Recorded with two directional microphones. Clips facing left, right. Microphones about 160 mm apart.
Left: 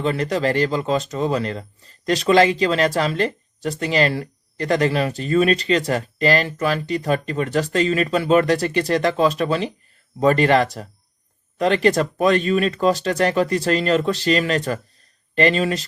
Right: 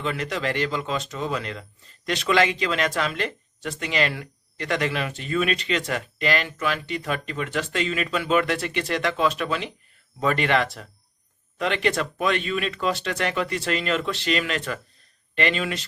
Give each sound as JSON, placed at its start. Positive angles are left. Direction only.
{"t": 0.0, "sound": "speech", "side_deg": 35}